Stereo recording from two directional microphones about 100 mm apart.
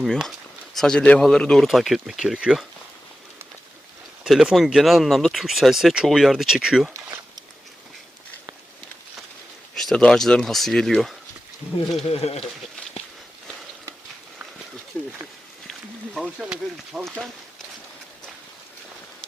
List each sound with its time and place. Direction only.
0.8 s speech: 5° left (ahead or behind)
4.2 s speech: 5° right (ahead or behind)
9.7 s speech: 5° left (ahead or behind)
12.0 s speech: 90° left
14.9 s a sound: 15° left (ahead or behind)
16.4 s speech: 5° right (ahead or behind)